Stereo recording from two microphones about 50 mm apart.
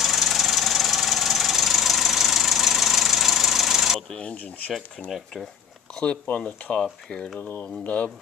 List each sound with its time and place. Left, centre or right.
0.0 s engine knocking: centre
4.1 s speech: left
5.1 s speech: centre
6.4 s speech: centre
7.3 s speech: left